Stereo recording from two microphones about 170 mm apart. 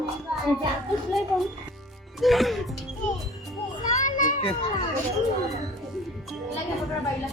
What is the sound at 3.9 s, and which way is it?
Children playing, 50° left (ahead or behind).